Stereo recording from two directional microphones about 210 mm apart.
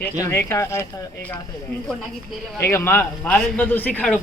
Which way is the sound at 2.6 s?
10° left (ahead or behind).